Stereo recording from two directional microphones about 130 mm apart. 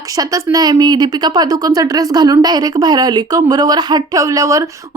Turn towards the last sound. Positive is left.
turn(degrees=-25)  # may be behind; listen again after turning